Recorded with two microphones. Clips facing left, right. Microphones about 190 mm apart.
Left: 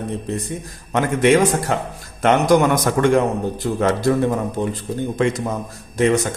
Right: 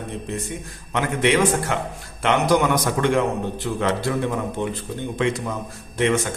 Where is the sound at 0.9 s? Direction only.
45° left (ahead or behind).